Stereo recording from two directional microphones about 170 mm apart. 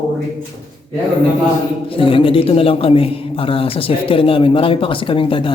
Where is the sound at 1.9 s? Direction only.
30° left (ahead or behind).